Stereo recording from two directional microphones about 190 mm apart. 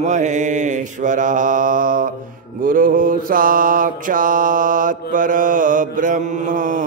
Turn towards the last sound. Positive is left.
turn(degrees=-45)  # may be behind; listen again after turning